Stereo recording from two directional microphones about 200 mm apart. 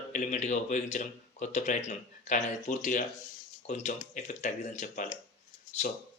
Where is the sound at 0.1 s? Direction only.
35° left (ahead or behind).